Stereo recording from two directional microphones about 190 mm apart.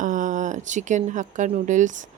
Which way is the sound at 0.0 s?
40° right (ahead or behind).